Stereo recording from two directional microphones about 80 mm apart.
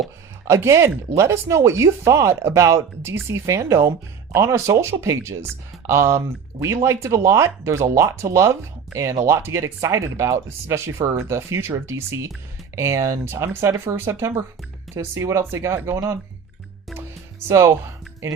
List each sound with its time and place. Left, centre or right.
0.4 s speech: right
17.5 s speech: right